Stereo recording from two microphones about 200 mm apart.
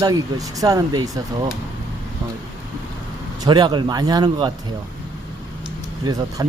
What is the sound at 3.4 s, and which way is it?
Speech, 20° right (ahead or behind).